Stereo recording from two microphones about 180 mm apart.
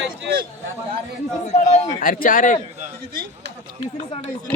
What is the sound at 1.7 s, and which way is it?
Speech, 50° left (ahead or behind).